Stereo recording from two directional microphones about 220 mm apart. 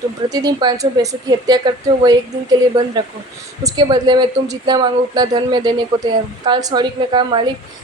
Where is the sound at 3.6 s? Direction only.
15° right (ahead or behind).